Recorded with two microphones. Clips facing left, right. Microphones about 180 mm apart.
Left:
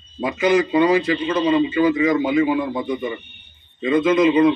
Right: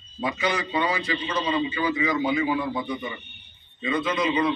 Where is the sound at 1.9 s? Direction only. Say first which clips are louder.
Left 7 dB; 35° left (ahead or behind).